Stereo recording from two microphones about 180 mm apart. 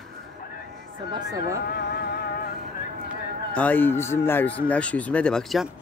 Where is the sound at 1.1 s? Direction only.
20° right (ahead or behind).